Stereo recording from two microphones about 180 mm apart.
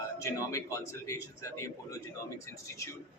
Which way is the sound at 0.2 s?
15° left (ahead or behind).